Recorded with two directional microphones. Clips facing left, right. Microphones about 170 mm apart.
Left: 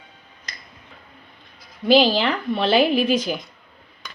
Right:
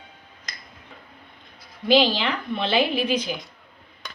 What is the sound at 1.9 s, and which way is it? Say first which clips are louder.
A woman's voice: left 3 dB; 40° left (ahead or behind).